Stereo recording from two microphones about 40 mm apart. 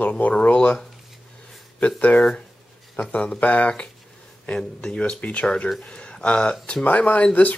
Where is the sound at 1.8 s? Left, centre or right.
Left.